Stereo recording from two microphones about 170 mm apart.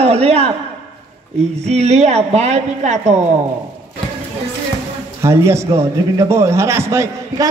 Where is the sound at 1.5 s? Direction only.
40° right (ahead or behind).